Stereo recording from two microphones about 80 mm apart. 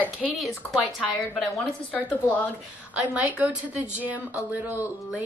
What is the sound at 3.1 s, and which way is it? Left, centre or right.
A woman's voice, right.